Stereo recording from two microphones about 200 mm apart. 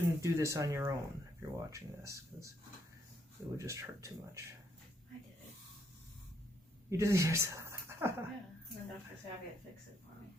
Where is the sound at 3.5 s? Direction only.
15° right (ahead or behind).